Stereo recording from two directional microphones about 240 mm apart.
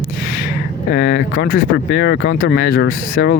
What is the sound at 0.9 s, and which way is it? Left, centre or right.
Speech, left.